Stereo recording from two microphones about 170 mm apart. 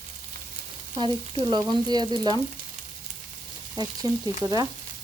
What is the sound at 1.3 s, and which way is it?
Frying, 30° right (ahead or behind).